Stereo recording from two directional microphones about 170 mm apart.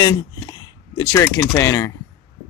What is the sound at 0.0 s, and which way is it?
Speech, 20° left (ahead or behind).